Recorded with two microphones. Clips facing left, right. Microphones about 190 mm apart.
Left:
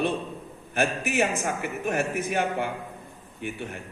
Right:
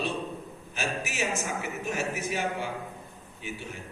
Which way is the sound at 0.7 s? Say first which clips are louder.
Left 8 dB; 55° left (ahead or behind).